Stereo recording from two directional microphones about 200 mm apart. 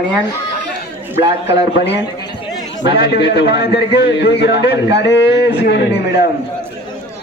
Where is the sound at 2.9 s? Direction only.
60° left (ahead or behind).